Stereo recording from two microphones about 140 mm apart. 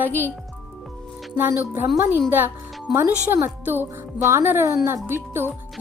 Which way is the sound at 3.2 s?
15° right (ahead or behind).